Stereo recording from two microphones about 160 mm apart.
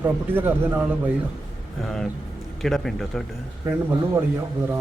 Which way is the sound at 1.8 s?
5° left (ahead or behind).